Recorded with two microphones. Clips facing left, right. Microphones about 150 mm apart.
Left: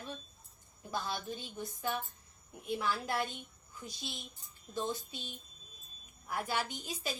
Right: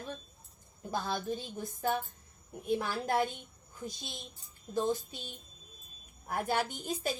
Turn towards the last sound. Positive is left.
turn(degrees=-50)  # may be behind; listen again after turning